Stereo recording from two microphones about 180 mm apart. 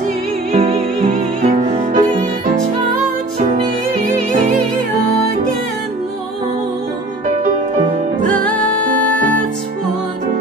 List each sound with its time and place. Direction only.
0.5 s music: 45° right (ahead or behind)
8.5 s music: 5° left (ahead or behind)